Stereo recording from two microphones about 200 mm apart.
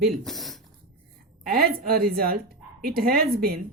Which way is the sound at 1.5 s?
50° right (ahead or behind).